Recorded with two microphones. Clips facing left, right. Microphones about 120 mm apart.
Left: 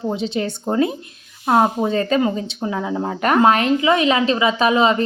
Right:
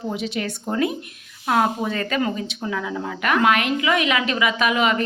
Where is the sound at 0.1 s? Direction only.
30° left (ahead or behind).